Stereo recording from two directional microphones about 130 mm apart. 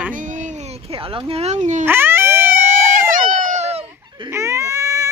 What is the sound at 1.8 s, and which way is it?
Dog, 15° right (ahead or behind).